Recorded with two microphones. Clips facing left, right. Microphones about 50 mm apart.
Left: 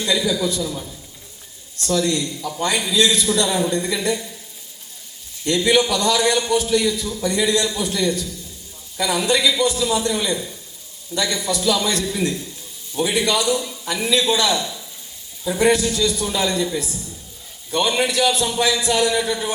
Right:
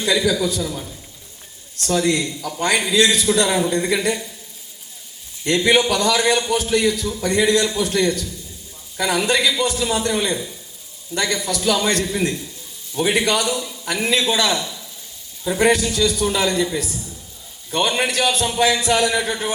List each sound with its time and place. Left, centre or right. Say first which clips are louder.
0.1 s a man's voice: right 2 dB; right
1.8 s a man's voice: right 1 dB; right
5.5 s a man's voice: right 1 dB; right